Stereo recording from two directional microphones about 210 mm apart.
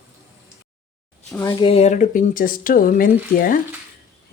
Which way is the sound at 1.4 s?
20° left (ahead or behind).